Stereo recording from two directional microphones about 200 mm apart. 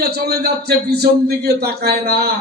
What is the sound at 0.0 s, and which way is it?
A man's voice, 55° right (ahead or behind).